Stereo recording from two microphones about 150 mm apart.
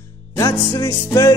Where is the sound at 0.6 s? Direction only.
20° left (ahead or behind).